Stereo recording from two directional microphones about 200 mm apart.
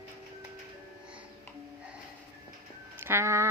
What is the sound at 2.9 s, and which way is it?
Speech, 10° right (ahead or behind).